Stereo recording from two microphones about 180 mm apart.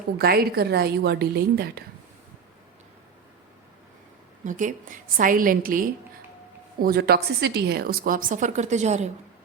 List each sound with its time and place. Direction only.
0.2 s a woman's voice: 60° right (ahead or behind)
4.4 s a woman's voice: 45° right (ahead or behind)